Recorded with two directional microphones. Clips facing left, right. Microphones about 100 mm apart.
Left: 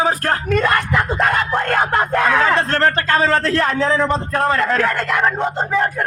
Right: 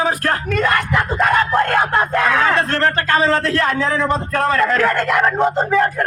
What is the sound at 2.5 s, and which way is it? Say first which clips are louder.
Speech: left 1 dB; 35° left (ahead or behind).